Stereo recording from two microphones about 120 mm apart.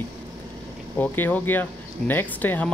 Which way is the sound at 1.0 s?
15° left (ahead or behind).